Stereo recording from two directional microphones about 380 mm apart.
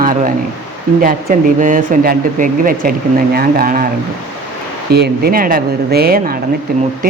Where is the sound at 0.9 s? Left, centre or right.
Right.